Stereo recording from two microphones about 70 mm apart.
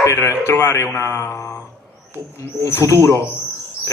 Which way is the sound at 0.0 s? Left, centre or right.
Left.